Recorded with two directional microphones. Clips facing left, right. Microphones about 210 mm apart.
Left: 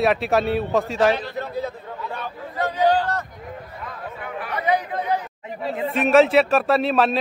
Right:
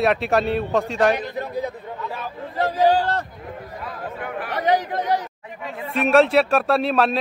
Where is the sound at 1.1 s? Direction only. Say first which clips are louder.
Right 1 dB; 15° right (ahead or behind).